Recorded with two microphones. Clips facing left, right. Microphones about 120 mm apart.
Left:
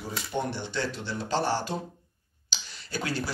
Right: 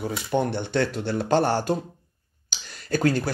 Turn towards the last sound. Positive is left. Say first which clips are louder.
# right 9 dB
turn(degrees=-45)  # may be behind; listen again after turning